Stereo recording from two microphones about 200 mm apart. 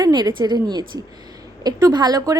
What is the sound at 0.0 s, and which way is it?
A woman's voice, 20° right (ahead or behind).